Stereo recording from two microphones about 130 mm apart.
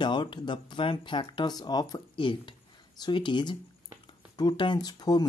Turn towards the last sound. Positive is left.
turn(degrees=30)  # may be behind; listen again after turning